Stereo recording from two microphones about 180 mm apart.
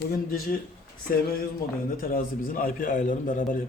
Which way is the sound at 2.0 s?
50° left (ahead or behind).